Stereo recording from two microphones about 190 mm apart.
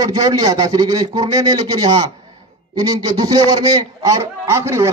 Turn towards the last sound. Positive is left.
turn(degrees=-15)  # may be behind; listen again after turning